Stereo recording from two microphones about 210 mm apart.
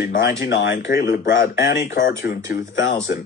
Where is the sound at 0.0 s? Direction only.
55° left (ahead or behind).